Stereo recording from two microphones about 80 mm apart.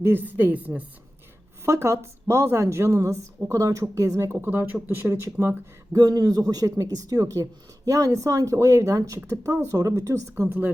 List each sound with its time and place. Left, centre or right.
0.0 s speech: right
1.6 s speech: right
6.0 s speech: right
9.4 s speech: right